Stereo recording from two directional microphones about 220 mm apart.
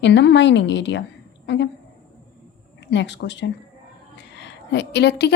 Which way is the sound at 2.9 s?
55° left (ahead or behind).